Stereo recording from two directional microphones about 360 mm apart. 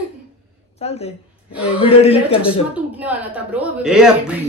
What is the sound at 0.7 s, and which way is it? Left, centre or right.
Speech, centre.